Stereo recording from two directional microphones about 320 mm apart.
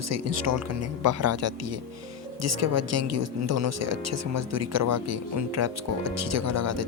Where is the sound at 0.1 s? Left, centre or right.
Right.